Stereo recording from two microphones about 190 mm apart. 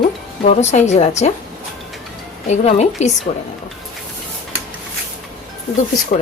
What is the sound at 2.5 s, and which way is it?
Speech, 35° left (ahead or behind).